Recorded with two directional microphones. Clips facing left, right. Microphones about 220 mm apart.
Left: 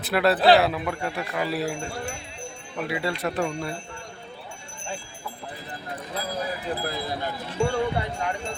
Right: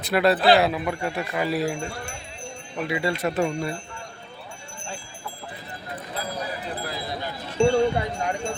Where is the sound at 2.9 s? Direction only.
Centre (ahead or behind).